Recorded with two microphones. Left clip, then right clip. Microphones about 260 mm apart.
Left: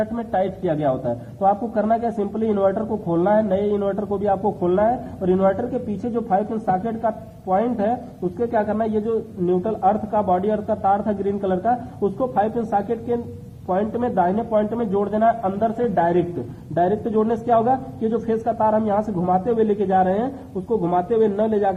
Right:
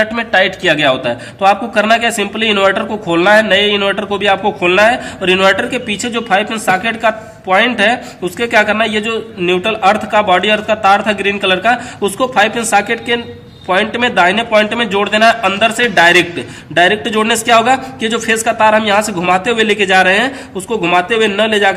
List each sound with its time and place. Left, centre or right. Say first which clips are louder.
0.0 s a man's voice: right 10 dB; right